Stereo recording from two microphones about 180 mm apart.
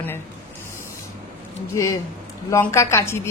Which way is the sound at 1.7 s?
15° left (ahead or behind).